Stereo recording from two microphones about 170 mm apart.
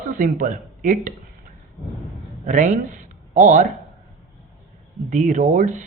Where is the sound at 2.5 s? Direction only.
50° right (ahead or behind).